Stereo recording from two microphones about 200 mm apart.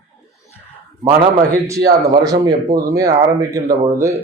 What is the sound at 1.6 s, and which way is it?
Speech, 15° right (ahead or behind).